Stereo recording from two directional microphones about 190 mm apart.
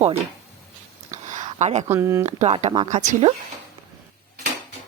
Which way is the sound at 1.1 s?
40° right (ahead or behind).